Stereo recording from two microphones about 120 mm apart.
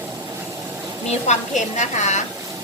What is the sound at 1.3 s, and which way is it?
Speech, 80° left.